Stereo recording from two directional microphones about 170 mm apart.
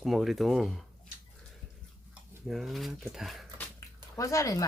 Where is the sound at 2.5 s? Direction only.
Centre (ahead or behind).